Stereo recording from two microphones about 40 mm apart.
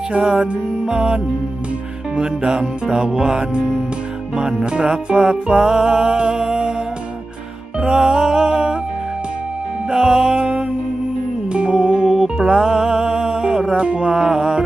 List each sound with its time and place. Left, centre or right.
0.1 s music: right
4.6 s music: right
7.8 s music: right
9.9 s music: centre
13.7 s music: right
14.2 s music: centre